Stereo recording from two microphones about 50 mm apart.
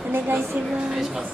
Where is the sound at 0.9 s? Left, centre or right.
Centre.